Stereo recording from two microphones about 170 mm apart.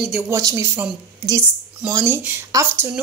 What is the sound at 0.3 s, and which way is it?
A woman's voice, 20° right (ahead or behind).